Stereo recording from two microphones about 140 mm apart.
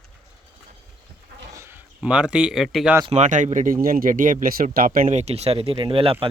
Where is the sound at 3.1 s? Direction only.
60° right (ahead or behind); by 5.1 s 90° right.